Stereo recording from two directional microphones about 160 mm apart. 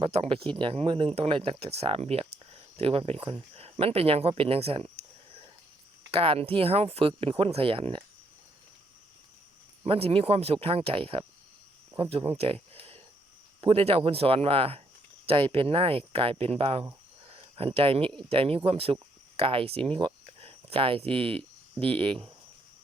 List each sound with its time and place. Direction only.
0.0 s speech: 35° right (ahead or behind)
6.1 s speech: 35° right (ahead or behind)
9.8 s speech: 40° right (ahead or behind)